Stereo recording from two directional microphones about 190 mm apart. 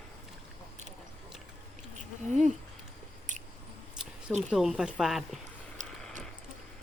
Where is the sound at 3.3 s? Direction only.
40° right (ahead or behind).